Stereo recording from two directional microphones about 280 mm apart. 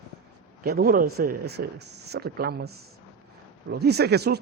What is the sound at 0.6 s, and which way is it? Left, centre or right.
Speech, right.